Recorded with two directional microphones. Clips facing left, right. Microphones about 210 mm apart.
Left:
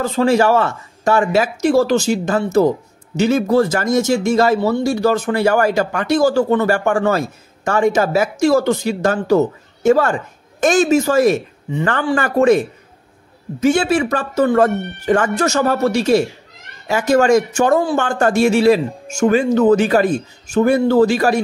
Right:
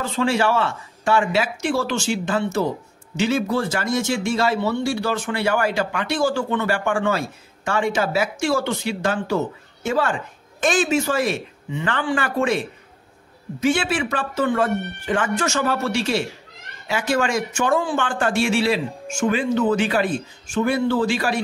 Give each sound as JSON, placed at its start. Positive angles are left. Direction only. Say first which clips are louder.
{"t": 0.0, "sound": "speech", "louder": "left 6 dB", "side_deg": 40}